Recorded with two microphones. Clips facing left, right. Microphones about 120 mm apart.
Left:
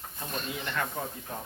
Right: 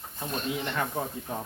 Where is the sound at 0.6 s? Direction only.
20° right (ahead or behind).